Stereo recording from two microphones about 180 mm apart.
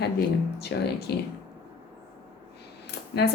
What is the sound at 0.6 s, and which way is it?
Speech, 60° left (ahead or behind).